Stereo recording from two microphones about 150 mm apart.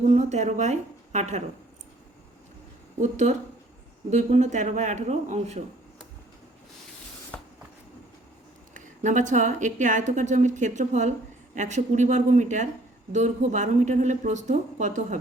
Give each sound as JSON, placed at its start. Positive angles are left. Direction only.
{"t": 0.0, "sound": "a woman's voice", "side_deg": -50}
{"t": 3.0, "sound": "speech", "side_deg": -50}
{"t": 8.7, "sound": "speech", "side_deg": -55}